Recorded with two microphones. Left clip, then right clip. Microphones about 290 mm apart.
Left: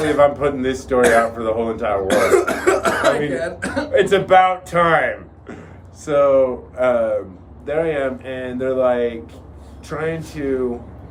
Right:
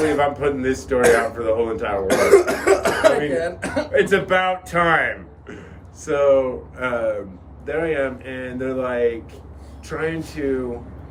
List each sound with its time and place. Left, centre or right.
0.2 s speech: centre
2.3 s speech: centre
3.9 s speech: centre